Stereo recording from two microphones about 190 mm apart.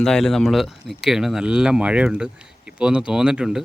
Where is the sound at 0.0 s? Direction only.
Centre (ahead or behind).